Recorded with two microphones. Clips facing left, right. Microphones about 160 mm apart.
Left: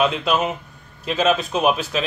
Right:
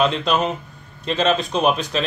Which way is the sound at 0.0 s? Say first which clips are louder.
Right 1 dB; 5° left (ahead or behind).